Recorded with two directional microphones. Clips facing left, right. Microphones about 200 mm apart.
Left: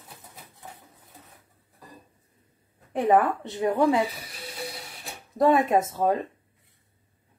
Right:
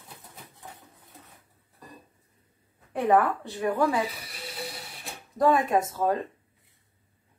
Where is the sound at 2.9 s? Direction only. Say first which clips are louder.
Left 1 dB; 20° left (ahead or behind).